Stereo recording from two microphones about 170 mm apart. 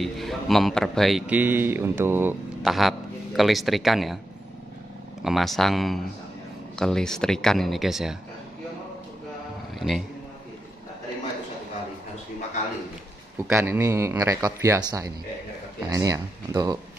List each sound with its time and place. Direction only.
0.0 s speech: centre (ahead or behind)
2.6 s a man's voice: centre (ahead or behind)
5.2 s speech: centre (ahead or behind)
9.8 s music: centre (ahead or behind)
13.5 s speech: 15° right (ahead or behind)